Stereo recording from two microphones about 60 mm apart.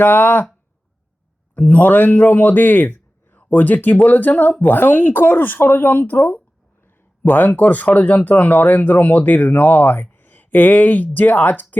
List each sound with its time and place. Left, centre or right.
0.0 s speech: left
1.5 s a man's voice: left